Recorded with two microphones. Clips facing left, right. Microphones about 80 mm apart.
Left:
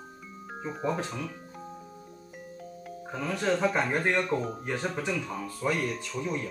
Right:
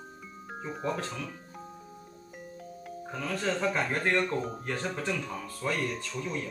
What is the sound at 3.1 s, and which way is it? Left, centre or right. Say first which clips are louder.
Speech: left 3 dB; centre.